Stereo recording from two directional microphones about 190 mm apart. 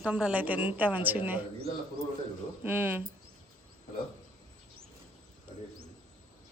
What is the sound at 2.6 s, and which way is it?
Speech, 10° right (ahead or behind).